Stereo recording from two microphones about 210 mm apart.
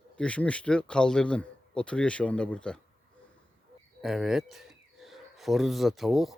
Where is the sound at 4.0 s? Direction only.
Centre (ahead or behind).